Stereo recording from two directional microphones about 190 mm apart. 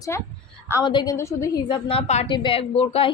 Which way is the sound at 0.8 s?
25° left (ahead or behind).